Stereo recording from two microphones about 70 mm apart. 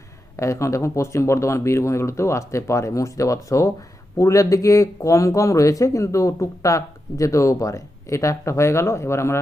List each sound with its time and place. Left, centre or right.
0.3 s speech: left